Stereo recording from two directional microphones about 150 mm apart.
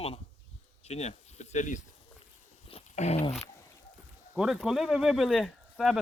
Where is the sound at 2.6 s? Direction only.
45° left (ahead or behind).